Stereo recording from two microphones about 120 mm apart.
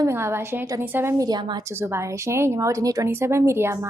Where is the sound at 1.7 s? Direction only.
20° right (ahead or behind).